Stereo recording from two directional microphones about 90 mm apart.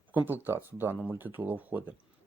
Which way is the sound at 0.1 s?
20° right (ahead or behind).